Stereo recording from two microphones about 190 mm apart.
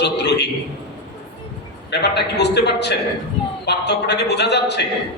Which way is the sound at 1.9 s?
60° left (ahead or behind).